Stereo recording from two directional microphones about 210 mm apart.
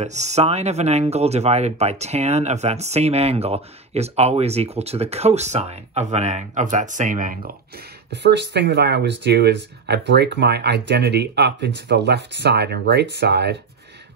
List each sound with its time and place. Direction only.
0.0 s speech: 35° right (ahead or behind); by 13.6 s 50° right (ahead or behind)